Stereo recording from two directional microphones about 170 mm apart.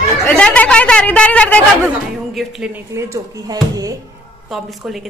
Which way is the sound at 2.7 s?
15° right (ahead or behind).